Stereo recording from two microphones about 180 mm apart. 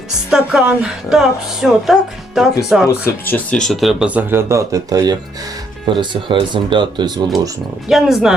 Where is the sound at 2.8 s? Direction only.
15° left (ahead or behind); by 7.5 s 25° right (ahead or behind).